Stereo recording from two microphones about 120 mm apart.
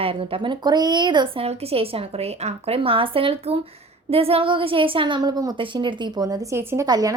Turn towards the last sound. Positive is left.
turn(degrees=-30)  # may be behind; listen again after turning